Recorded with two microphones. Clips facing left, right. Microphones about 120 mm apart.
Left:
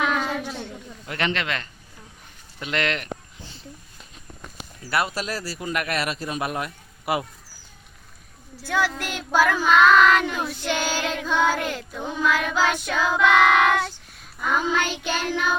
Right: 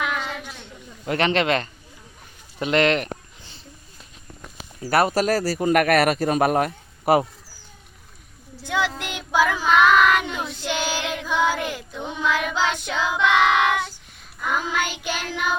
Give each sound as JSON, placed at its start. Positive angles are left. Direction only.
{"t": 0.2, "sound": "a sound", "side_deg": 40}
{"t": 1.0, "sound": "speech", "side_deg": -30}
{"t": 4.9, "sound": "a man's voice", "side_deg": -45}
{"t": 8.6, "sound": "speech", "side_deg": -20}
{"t": 9.0, "sound": "child singing", "side_deg": -20}
{"t": 11.9, "sound": "child singing", "side_deg": 5}
{"t": 12.2, "sound": "speech", "side_deg": -20}
{"t": 12.8, "sound": "child singing", "side_deg": -20}